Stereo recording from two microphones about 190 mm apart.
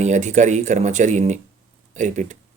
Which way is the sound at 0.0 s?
40° right (ahead or behind).